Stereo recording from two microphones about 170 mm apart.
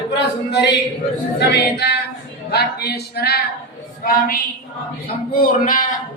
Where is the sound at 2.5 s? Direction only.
70° left (ahead or behind).